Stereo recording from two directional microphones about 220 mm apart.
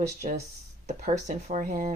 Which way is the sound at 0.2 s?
35° right (ahead or behind).